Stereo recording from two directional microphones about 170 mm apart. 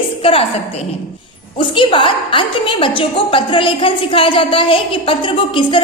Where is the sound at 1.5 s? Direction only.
30° left (ahead or behind).